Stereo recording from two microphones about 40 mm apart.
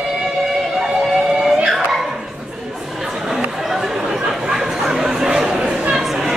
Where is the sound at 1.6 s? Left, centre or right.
Centre.